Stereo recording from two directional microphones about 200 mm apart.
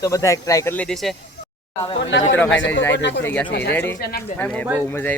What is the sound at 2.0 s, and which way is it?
Speech, 65° left (ahead or behind).